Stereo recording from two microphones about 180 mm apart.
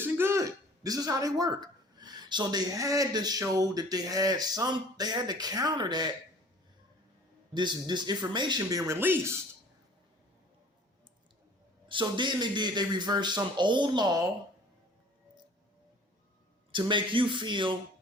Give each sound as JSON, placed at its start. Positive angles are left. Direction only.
{"t": 0.0, "sound": "speech", "side_deg": -15}
{"t": 7.5, "sound": "a man's voice", "side_deg": -25}
{"t": 11.9, "sound": "a man's voice", "side_deg": -25}
{"t": 16.7, "sound": "a man's voice", "side_deg": -25}